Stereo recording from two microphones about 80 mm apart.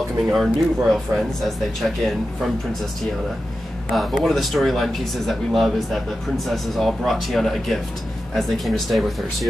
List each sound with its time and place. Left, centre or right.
0.3 s speech: centre
3.9 s speech: centre